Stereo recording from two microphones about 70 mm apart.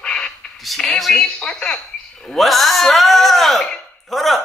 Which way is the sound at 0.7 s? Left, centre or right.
Centre.